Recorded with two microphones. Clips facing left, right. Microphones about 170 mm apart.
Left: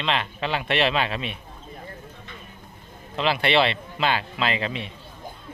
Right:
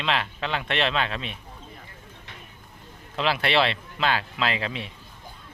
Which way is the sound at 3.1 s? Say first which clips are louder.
Left 2 dB; centre (ahead or behind).